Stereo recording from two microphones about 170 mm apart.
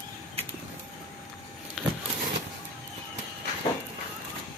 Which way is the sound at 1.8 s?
Centre (ahead or behind).